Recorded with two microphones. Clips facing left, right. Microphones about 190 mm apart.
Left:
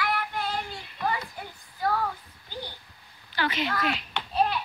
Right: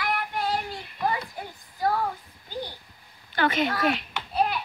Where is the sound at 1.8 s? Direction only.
15° right (ahead or behind).